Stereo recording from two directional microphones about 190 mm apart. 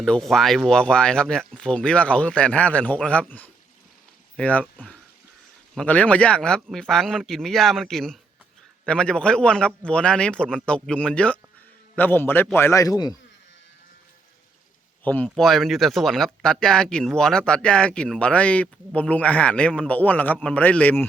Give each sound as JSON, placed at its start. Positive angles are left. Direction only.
{"t": 0.0, "sound": "a man's voice", "side_deg": 5}
{"t": 15.0, "sound": "a man's voice", "side_deg": 10}